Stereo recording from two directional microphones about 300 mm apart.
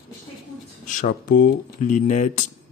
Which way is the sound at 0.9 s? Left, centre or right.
Left.